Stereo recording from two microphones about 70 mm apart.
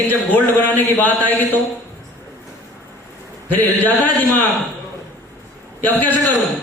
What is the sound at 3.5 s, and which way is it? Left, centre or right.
Speech, left.